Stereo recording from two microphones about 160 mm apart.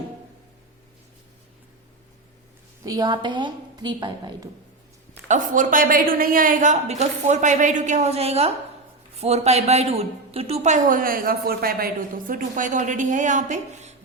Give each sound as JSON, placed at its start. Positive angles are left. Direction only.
{"t": 2.8, "sound": "a woman's voice", "side_deg": -25}
{"t": 5.3, "sound": "a woman's voice", "side_deg": -55}